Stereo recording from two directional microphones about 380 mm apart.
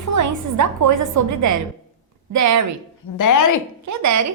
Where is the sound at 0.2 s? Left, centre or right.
Right.